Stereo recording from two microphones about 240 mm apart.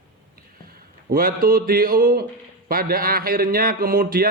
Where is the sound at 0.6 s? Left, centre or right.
Right.